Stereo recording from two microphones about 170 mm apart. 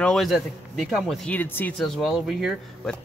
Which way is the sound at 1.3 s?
10° left (ahead or behind).